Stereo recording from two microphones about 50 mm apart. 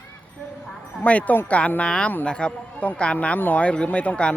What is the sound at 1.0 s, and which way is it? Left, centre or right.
Speech, left.